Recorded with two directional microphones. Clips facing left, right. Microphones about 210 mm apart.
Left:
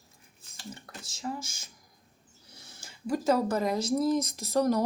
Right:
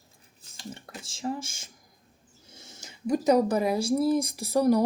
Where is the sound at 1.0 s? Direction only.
30° right (ahead or behind).